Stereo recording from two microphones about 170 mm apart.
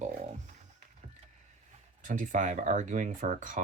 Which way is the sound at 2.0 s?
50° right (ahead or behind).